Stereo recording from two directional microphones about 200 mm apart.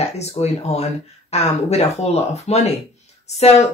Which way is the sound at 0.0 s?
35° left (ahead or behind).